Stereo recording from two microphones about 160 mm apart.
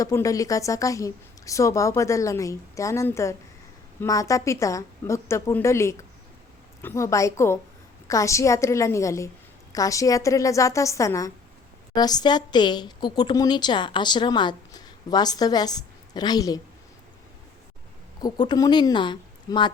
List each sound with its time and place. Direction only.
0.0 s a woman's voice: 20° left (ahead or behind)
18.2 s a woman's voice: 25° left (ahead or behind)